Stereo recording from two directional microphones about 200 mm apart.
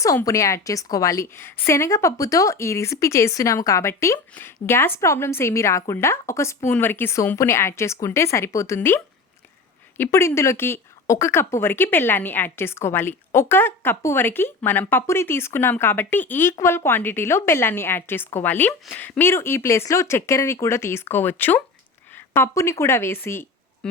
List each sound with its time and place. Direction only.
0.0 s a woman's voice: 15° left (ahead or behind)
10.0 s a woman's voice: 15° left (ahead or behind)